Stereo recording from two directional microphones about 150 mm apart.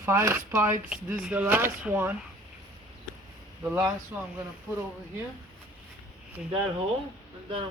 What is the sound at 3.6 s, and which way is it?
Speech, 15° right (ahead or behind).